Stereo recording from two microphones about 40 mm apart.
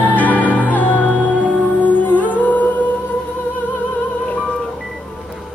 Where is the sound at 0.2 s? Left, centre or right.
Left.